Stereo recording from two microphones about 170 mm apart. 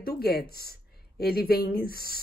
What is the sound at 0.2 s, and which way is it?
Speech, 65° left (ahead or behind).